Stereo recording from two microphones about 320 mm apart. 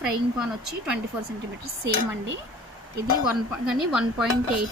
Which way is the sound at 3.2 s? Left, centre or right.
Centre.